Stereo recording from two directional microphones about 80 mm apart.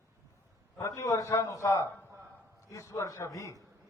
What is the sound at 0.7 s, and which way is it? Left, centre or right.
A man's voice, left.